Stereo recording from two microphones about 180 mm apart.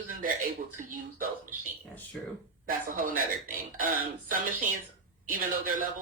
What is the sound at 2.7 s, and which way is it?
Speech, 50° right (ahead or behind).